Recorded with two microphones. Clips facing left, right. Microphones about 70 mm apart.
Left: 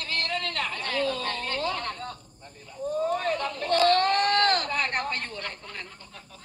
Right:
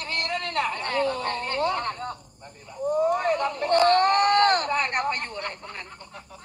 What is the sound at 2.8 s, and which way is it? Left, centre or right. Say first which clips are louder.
Speech: right 4 dB; centre.